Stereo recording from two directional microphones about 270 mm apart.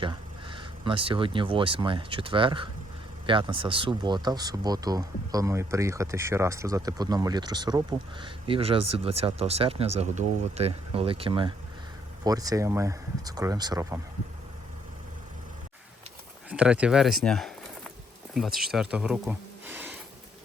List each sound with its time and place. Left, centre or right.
0.0 s speech: centre
16.5 s speech: centre